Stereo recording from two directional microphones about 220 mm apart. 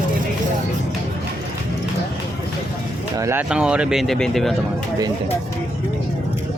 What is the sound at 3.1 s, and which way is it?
Speech, 10° right (ahead or behind).